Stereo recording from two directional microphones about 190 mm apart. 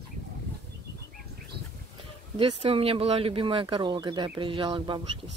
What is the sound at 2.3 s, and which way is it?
Speech, 30° right (ahead or behind).